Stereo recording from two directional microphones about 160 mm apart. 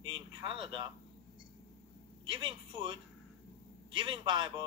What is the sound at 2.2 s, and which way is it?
A man's voice, 30° right (ahead or behind).